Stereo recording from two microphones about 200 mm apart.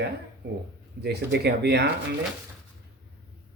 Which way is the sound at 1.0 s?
55° right (ahead or behind).